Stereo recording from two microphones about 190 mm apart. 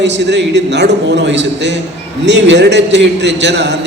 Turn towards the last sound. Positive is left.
turn(degrees=-65)  # may be behind; listen again after turning